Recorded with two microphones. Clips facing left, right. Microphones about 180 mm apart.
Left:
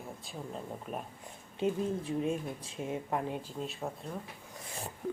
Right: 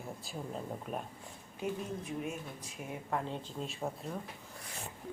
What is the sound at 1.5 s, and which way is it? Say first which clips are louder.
Speech: left 6 dB; 30° left (ahead or behind).